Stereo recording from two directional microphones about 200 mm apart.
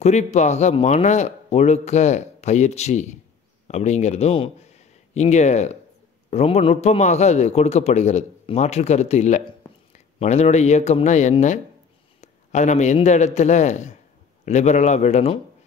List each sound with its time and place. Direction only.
0.0 s a man's voice: 35° left (ahead or behind)